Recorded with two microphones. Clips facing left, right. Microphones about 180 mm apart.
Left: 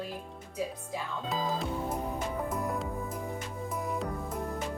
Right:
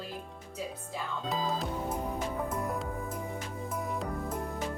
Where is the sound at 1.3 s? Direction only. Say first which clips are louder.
Left 1 dB; centre (ahead or behind).